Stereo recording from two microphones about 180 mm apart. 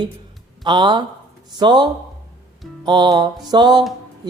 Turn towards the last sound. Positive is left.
turn(degrees=-25)  # may be behind; listen again after turning